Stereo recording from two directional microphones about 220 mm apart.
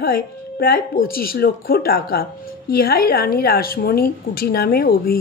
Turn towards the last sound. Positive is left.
turn(degrees=45)  # may be behind; listen again after turning